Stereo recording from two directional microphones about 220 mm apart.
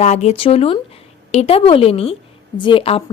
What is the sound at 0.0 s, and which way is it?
Speech, 30° left (ahead or behind).